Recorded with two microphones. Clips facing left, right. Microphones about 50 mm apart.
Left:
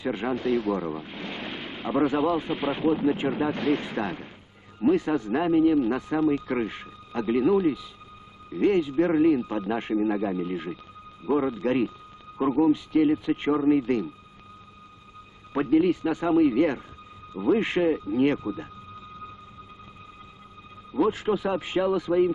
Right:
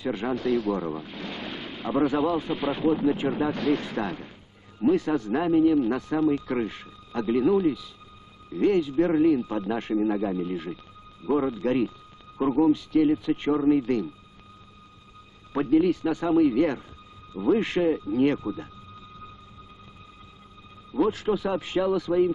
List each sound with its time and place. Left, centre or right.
0.0 s speech: centre
15.5 s speech: left
21.1 s speech: left